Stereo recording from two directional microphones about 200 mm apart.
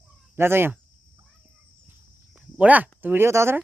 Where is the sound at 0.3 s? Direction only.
10° right (ahead or behind).